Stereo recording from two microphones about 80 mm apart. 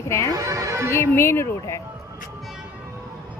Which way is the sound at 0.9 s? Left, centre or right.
Left.